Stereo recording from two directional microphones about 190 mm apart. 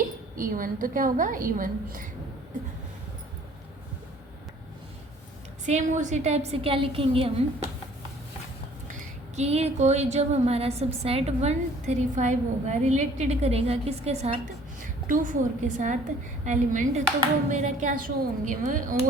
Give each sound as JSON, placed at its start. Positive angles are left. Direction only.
{"t": 0.3, "sound": "a woman's voice", "side_deg": -45}
{"t": 5.6, "sound": "speech", "side_deg": -40}
{"t": 8.9, "sound": "speech", "side_deg": -35}
{"t": 15.0, "sound": "a woman's voice", "side_deg": -45}